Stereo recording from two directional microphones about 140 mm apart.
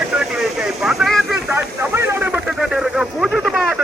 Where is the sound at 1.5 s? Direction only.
15° right (ahead or behind).